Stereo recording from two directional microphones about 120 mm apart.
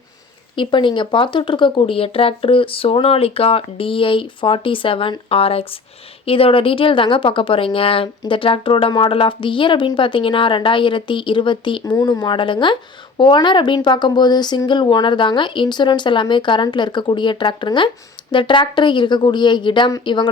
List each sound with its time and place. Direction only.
0.5 s a woman's voice: 45° left (ahead or behind)